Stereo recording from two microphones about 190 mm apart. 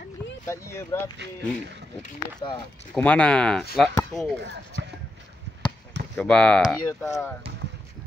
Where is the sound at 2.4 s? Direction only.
20° left (ahead or behind).